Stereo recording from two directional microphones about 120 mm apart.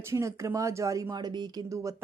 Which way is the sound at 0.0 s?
25° right (ahead or behind).